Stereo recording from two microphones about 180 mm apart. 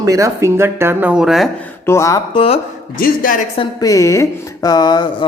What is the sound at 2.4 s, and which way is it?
Speech, 30° left (ahead or behind).